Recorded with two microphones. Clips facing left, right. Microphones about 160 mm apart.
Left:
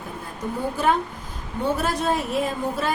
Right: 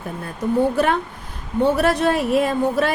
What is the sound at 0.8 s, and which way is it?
A woman's voice, 65° right (ahead or behind).